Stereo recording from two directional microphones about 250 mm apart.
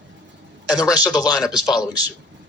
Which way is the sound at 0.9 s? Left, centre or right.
Centre.